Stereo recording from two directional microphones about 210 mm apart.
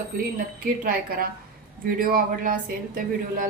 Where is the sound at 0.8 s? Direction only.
45° right (ahead or behind).